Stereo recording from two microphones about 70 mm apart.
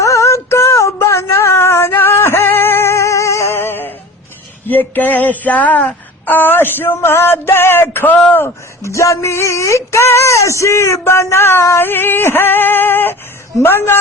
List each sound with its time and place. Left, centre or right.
0.0 s a sound: left
8.3 s speech: left
11.8 s female singing: left